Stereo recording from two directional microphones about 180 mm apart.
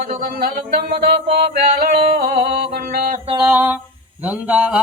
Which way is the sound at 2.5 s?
65° right (ahead or behind).